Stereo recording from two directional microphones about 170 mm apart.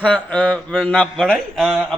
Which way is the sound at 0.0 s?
5° left (ahead or behind).